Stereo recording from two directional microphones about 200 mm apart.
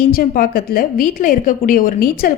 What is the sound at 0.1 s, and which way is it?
A woman's voice, 45° left (ahead or behind).